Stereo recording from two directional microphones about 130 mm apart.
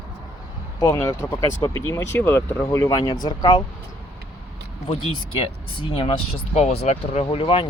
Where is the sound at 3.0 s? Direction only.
35° left (ahead or behind).